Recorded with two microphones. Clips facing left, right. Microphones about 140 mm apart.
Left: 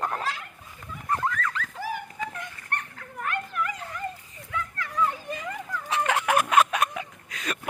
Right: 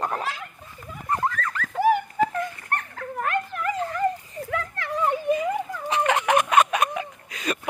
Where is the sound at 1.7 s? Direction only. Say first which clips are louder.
Right 13 dB; 65° right (ahead or behind).